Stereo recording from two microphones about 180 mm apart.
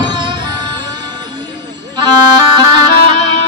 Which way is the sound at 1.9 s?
25° right (ahead or behind).